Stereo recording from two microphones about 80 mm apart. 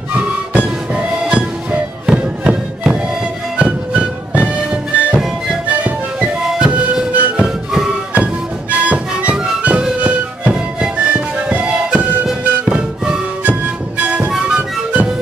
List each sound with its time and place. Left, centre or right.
0.1 s music: centre
14.3 s flute: centre